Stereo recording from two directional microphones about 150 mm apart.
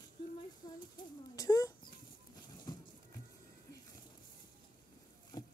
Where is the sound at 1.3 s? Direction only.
25° left (ahead or behind).